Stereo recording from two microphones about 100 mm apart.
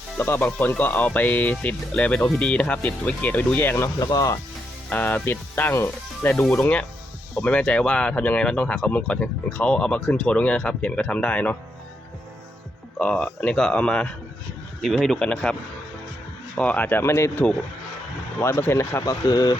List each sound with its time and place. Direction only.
0.2 s speech: 20° left (ahead or behind)
4.0 s speech: 40° left (ahead or behind)
4.9 s speech: 15° left (ahead or behind)
6.3 s speech: 5° left (ahead or behind)
13.0 s speech: 15° left (ahead or behind)
16.6 s speech: 15° left (ahead or behind)
19.0 s speech: 40° left (ahead or behind)